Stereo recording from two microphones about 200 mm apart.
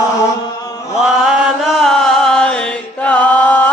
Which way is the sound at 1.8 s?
Centre (ahead or behind).